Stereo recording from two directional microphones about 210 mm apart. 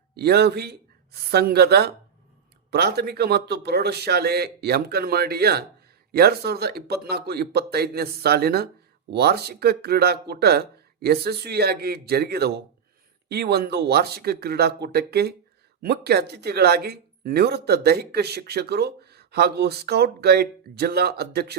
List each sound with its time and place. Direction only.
0.1 s speech: 50° right (ahead or behind)